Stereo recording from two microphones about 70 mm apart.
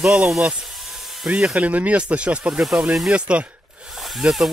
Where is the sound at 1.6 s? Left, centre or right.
Centre.